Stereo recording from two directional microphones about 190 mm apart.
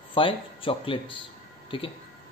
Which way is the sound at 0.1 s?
25° left (ahead or behind).